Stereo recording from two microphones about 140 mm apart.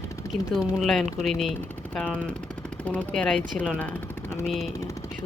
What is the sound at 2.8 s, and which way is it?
Speech, 10° left (ahead or behind).